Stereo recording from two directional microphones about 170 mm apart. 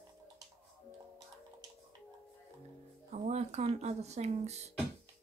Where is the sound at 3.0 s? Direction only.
40° right (ahead or behind).